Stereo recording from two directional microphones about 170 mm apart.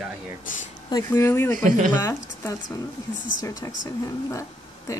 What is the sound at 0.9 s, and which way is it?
Speech, 15° left (ahead or behind).